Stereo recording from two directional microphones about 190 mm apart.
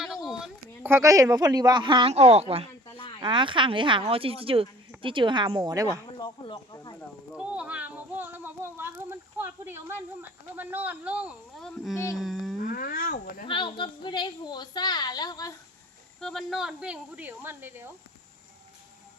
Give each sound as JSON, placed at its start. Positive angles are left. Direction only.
{"t": 0.0, "sound": "speech", "side_deg": 0}
{"t": 2.8, "sound": "a sound", "side_deg": 25}
{"t": 3.2, "sound": "speech", "side_deg": -25}
{"t": 6.1, "sound": "a woman's voice", "side_deg": 20}
{"t": 7.3, "sound": "speech", "side_deg": -5}
{"t": 12.6, "sound": "speech", "side_deg": 50}
{"t": 13.5, "sound": "a woman's voice", "side_deg": 25}
{"t": 16.2, "sound": "speech", "side_deg": 0}